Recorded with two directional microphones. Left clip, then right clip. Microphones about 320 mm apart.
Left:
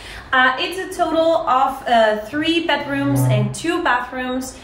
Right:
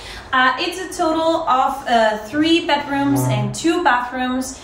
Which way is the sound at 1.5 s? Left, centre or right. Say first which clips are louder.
Even; centre.